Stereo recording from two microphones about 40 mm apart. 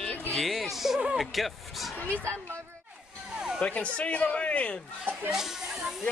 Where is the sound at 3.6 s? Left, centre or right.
Left.